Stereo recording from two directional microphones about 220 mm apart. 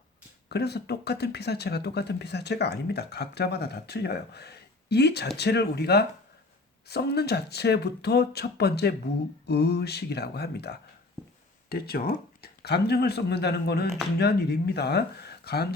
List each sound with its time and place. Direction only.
0.4 s speech: 50° left (ahead or behind)